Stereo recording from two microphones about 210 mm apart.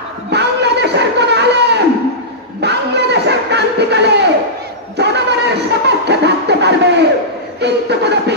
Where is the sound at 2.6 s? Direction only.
55° right (ahead or behind).